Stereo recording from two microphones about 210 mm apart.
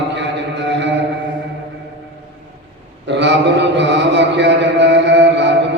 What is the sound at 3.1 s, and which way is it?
Mantra, 55° right (ahead or behind).